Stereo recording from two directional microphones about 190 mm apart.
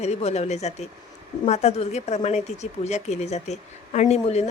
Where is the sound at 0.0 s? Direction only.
35° left (ahead or behind).